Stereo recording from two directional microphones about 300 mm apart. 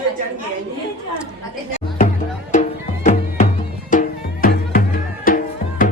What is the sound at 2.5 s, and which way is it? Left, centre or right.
Music, left.